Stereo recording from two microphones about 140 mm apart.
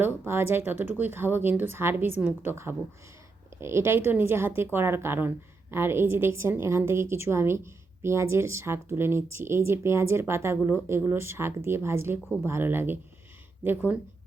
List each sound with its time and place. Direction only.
0.0 s a woman's voice: 15° right (ahead or behind)